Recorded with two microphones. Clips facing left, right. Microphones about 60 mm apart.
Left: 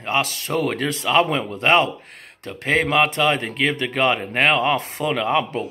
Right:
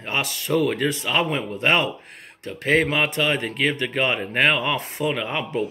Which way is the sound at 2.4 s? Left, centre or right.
Left.